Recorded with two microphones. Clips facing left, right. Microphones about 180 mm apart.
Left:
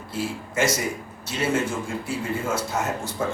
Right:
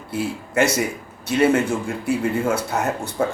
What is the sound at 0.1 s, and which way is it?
Speech, 65° right (ahead or behind).